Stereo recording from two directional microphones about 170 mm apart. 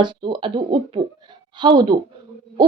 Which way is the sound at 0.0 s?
30° right (ahead or behind).